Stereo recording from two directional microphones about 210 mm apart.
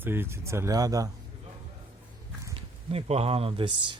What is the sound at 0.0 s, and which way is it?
Speech, 10° right (ahead or behind).